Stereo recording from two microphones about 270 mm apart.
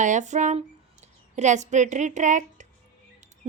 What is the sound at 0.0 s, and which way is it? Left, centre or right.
A woman's voice, right.